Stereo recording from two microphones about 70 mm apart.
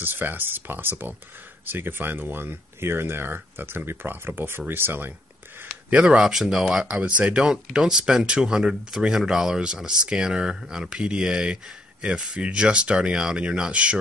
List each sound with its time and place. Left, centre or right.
0.0 s speech: right
5.9 s speech: centre